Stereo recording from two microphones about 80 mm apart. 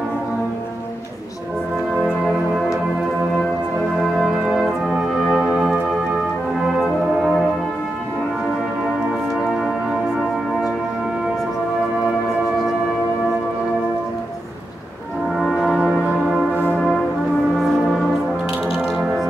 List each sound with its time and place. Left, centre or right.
2.0 s organ: centre
4.2 s organ: centre
5.3 s music: centre
15.3 s brass instrument: centre
15.8 s church bell: centre
18.9 s music: centre